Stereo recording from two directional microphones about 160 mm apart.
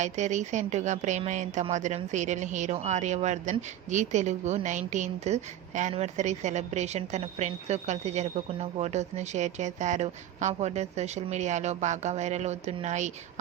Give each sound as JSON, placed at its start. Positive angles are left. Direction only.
{"t": 0.0, "sound": "a woman's voice", "side_deg": -50}